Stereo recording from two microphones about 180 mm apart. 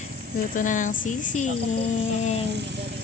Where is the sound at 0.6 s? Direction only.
45° left (ahead or behind).